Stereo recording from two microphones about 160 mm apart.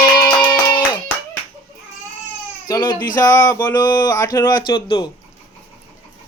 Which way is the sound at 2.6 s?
25° left (ahead or behind).